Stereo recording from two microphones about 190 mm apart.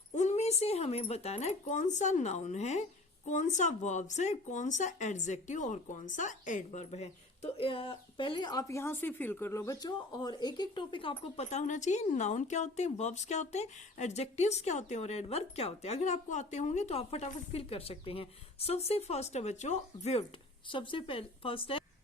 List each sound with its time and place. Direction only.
0.1 s a woman's voice: 35° left (ahead or behind)